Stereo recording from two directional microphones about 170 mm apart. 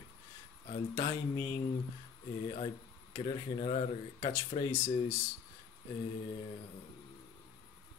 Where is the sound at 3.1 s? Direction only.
35° left (ahead or behind).